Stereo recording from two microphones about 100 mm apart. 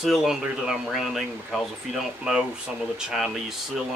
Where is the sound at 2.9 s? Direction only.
5° right (ahead or behind).